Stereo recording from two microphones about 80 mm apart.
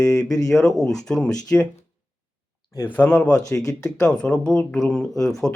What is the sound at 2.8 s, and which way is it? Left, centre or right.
Speech, centre.